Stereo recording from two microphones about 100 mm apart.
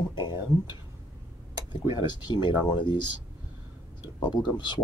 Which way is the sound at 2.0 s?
50° left (ahead or behind).